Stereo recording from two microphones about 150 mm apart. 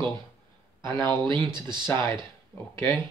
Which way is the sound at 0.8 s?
30° right (ahead or behind).